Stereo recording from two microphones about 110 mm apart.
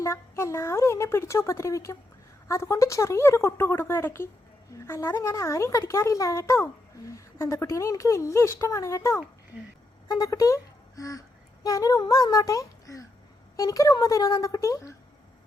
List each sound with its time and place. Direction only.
0.0 s a child's voice: 25° left (ahead or behind)